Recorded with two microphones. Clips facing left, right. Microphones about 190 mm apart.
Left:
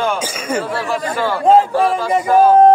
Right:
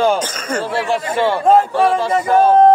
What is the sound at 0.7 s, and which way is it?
Speech, 25° right (ahead or behind).